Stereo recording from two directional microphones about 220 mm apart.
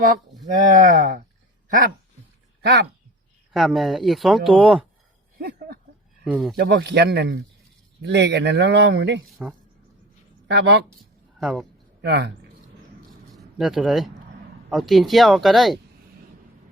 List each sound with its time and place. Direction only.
0.0 s speech: 35° right (ahead or behind)
2.6 s speech: 50° right (ahead or behind)
3.5 s speech: centre (ahead or behind)
5.4 s a sound: 45° right (ahead or behind)
6.2 s speech: 5° right (ahead or behind)
6.6 s speech: 45° right (ahead or behind)
10.5 s speech: 50° right (ahead or behind)
11.3 s speech: centre (ahead or behind)
12.0 s speech: 50° right (ahead or behind)
13.1 s a sound: centre (ahead or behind)
14.7 s speech: centre (ahead or behind)